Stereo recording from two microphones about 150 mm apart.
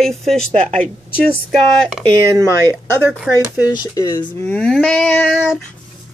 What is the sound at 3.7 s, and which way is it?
Speech, 25° left (ahead or behind).